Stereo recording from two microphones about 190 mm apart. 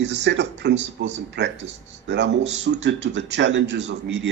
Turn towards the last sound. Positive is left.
turn(degrees=-65)  # may be behind; listen again after turning